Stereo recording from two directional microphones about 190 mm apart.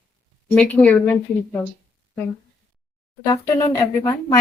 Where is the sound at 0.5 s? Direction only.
5° left (ahead or behind).